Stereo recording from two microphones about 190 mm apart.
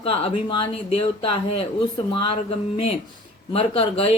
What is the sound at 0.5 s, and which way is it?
Speech, 30° left (ahead or behind).